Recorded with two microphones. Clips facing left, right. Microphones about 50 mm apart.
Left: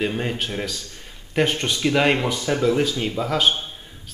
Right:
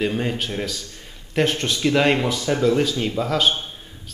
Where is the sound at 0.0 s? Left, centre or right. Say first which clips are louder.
Right 1 dB; centre.